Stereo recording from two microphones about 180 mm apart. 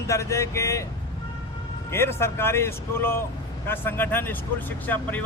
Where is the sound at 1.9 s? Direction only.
15° left (ahead or behind).